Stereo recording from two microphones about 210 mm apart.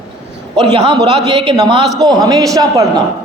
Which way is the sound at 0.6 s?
20° right (ahead or behind).